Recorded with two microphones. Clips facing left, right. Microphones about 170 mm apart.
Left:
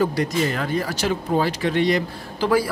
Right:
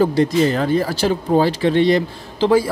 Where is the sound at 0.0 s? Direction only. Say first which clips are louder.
Right 6 dB; 30° right (ahead or behind).